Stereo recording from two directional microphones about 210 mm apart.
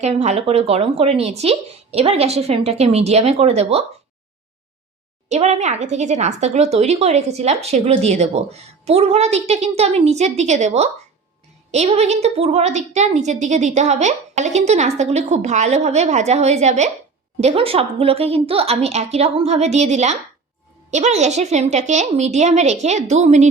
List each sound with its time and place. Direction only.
0.0 s speech: 30° right (ahead or behind)
5.3 s a woman's voice: 30° right (ahead or behind)